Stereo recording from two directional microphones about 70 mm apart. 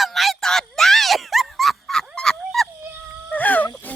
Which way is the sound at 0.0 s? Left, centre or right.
Centre.